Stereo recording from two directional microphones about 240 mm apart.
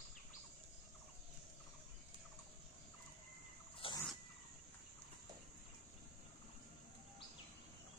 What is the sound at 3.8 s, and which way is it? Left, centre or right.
Wild animals, left.